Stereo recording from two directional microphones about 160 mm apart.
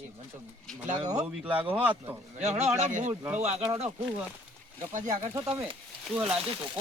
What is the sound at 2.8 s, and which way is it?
Speech, 45° right (ahead or behind).